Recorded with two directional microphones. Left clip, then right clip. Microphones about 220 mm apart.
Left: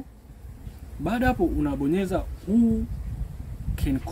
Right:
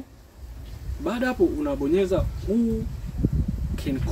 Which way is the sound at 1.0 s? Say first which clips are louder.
Right 1 dB; 40° left (ahead or behind).